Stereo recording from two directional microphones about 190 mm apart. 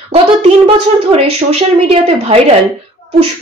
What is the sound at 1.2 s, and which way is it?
Speech, 30° right (ahead or behind).